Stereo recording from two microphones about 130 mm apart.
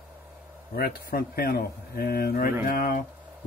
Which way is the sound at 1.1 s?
90° left.